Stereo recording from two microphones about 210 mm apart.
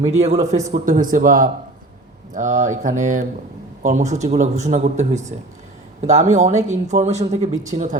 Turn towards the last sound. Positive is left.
turn(degrees=-35)  # may be behind; listen again after turning